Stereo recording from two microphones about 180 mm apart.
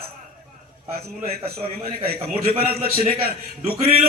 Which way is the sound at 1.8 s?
60° right (ahead or behind).